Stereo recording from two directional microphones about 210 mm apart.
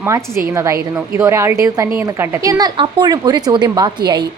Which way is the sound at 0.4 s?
15° right (ahead or behind).